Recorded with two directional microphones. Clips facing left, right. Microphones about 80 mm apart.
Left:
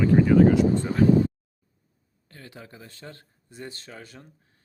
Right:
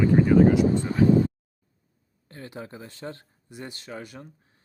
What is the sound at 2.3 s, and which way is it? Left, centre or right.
Speech, right.